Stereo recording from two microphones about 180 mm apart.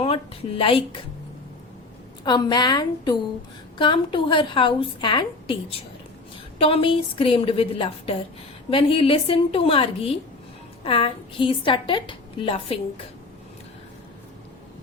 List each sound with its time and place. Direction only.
0.0 s a woman's voice: 30° left (ahead or behind)
2.2 s a woman's voice: 25° left (ahead or behind)
6.6 s a woman's voice: 30° left (ahead or behind)